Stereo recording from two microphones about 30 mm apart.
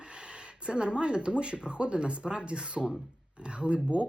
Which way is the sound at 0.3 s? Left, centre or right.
Right.